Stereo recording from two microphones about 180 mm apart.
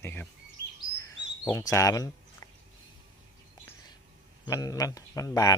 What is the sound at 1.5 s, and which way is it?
Speech, 20° left (ahead or behind).